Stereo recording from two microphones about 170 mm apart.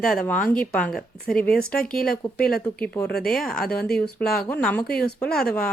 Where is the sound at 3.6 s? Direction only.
65° left (ahead or behind).